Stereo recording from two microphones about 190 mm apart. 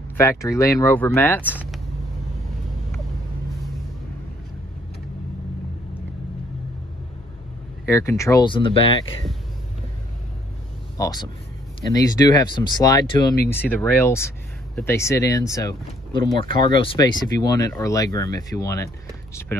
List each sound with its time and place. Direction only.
0.2 s speech: 15° left (ahead or behind)
1.5 s vehicle: 5° right (ahead or behind)
7.8 s speech: 15° left (ahead or behind)
11.0 s speech: 20° left (ahead or behind)
13.5 s speech: 10° left (ahead or behind)